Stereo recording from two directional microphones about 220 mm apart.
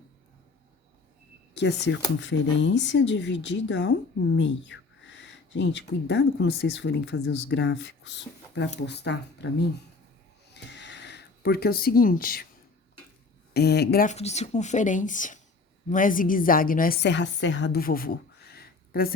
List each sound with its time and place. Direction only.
1.5 s speech: 50° left (ahead or behind)
10.5 s a sound: 50° left (ahead or behind)
13.5 s a woman's voice: 50° left (ahead or behind)